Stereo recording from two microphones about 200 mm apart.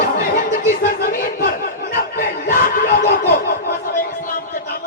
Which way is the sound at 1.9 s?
45° left (ahead or behind).